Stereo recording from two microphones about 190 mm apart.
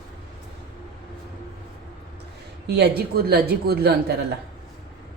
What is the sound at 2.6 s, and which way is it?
Speech, 60° right (ahead or behind).